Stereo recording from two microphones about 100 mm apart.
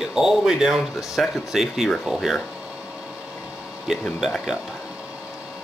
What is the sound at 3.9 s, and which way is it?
Speech, 5° right (ahead or behind).